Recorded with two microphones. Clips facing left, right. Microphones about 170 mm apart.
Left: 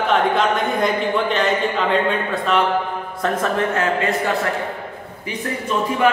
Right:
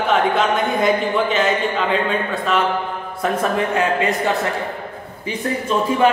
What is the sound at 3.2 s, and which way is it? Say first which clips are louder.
Speech: right 1 dB; 10° right (ahead or behind).